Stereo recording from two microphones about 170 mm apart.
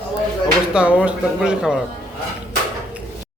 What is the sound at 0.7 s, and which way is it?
Speech, 5° right (ahead or behind).